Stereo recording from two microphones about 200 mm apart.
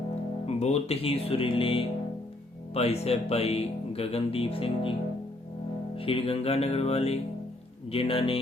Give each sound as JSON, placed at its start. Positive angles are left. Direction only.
{"t": 0.4, "sound": "speech", "side_deg": 35}
{"t": 6.0, "sound": "music", "side_deg": 30}
{"t": 7.9, "sound": "speech", "side_deg": 30}